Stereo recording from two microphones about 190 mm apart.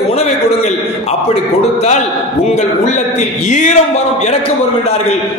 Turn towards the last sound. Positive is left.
turn(degrees=35)  # may be behind; listen again after turning